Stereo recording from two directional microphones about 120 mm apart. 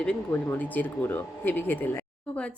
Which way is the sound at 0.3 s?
15° left (ahead or behind).